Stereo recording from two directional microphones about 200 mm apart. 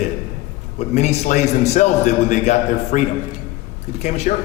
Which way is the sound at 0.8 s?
35° left (ahead or behind).